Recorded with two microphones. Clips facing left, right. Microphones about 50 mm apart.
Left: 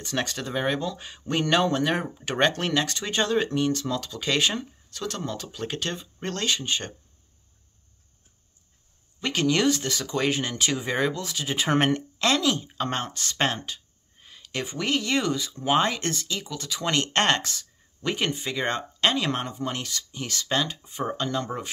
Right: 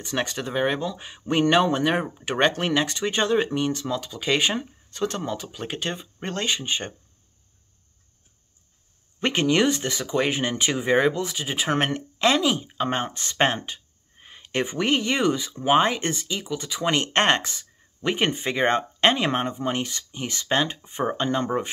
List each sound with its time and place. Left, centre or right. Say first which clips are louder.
0.0 s speech: right 2 dB; centre
9.2 s speech: right 2 dB; right
11.5 s speech: left 2 dB; centre
12.2 s speech: right 4 dB; centre